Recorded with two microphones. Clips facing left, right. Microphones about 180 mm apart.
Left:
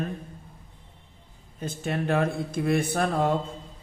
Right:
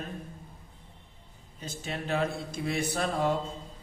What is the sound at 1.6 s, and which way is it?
Speech, 55° left (ahead or behind).